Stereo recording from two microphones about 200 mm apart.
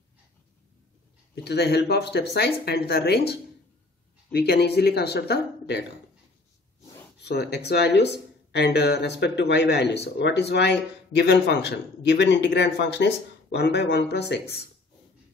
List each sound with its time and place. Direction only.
1.3 s speech: 55° left (ahead or behind)
7.2 s speech: 55° left (ahead or behind)